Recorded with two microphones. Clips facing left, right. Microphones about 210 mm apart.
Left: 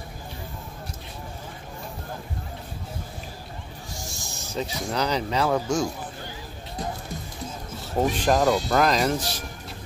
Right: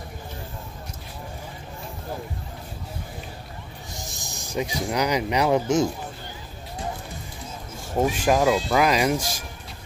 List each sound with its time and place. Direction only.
3.9 s speech: 20° right (ahead or behind)
7.9 s speech: 10° right (ahead or behind)